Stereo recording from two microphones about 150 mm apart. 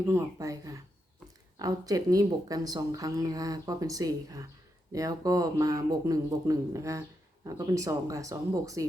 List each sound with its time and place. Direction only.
0.0 s speech: 20° right (ahead or behind)